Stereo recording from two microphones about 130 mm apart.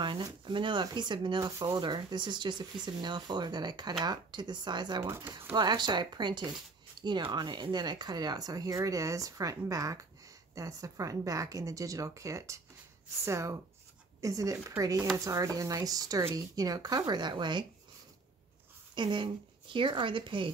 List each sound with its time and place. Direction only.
0.0 s speech: 35° right (ahead or behind)
5.0 s speech: 20° right (ahead or behind)
5.6 s speech: 35° right (ahead or behind)
18.9 s speech: 35° right (ahead or behind)